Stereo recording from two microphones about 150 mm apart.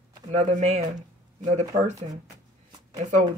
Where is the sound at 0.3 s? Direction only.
50° right (ahead or behind).